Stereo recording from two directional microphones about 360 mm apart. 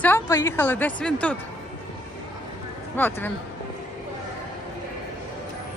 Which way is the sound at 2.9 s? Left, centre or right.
Centre.